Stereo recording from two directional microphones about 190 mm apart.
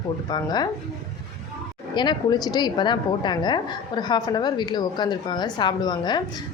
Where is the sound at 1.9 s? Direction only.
25° left (ahead or behind).